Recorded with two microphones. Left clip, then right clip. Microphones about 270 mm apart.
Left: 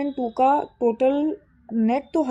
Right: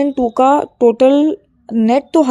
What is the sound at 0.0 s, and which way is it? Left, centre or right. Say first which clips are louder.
Speech: right 8 dB; right.